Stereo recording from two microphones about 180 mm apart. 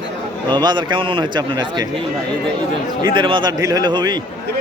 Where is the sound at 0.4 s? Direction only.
25° right (ahead or behind).